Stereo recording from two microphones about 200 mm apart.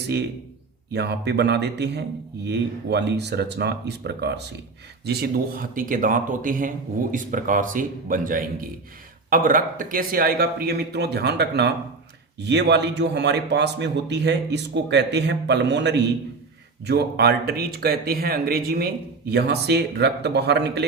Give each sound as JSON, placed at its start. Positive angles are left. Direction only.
{"t": 0.9, "sound": "a man's voice", "side_deg": -55}